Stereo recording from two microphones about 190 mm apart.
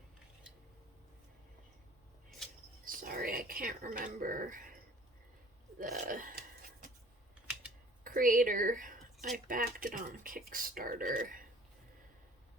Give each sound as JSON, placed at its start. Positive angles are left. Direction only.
{"t": 2.8, "sound": "whispering", "side_deg": -45}
{"t": 5.8, "sound": "a sound", "side_deg": -45}
{"t": 8.0, "sound": "a woman's voice", "side_deg": -45}